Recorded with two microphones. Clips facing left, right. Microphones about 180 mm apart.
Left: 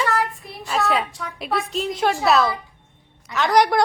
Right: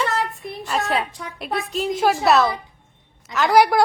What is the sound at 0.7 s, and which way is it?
A woman's voice, centre (ahead or behind).